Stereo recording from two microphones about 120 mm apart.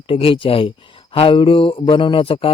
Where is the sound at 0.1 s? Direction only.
50° left (ahead or behind).